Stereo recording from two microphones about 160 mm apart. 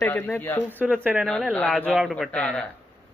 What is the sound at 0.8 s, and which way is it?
Speech, 10° right (ahead or behind).